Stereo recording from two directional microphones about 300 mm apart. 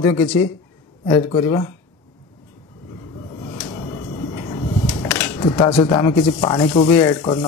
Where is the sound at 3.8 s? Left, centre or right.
Centre.